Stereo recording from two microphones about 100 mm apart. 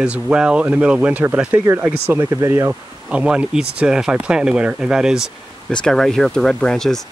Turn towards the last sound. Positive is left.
turn(degrees=5)  # may be behind; listen again after turning